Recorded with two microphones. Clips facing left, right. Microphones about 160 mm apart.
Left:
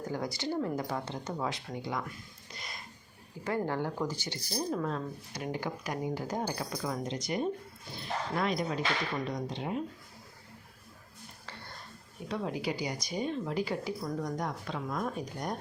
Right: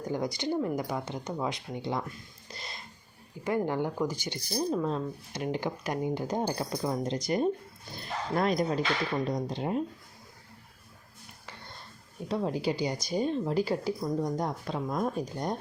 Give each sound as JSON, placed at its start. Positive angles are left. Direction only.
{"t": 0.1, "sound": "speech", "side_deg": -20}
{"t": 2.5, "sound": "music", "side_deg": -30}
{"t": 3.4, "sound": "speech", "side_deg": -15}
{"t": 12.3, "sound": "speech", "side_deg": -30}